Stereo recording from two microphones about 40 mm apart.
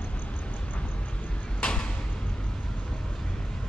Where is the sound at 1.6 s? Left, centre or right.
Left.